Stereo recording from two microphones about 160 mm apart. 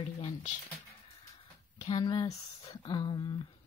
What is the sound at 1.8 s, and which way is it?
Speech, 30° left (ahead or behind).